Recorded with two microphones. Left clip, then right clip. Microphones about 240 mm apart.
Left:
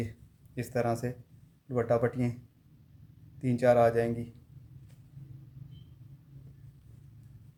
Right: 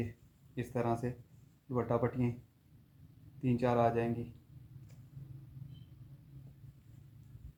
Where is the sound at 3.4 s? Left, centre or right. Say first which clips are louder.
Left 7 dB; left.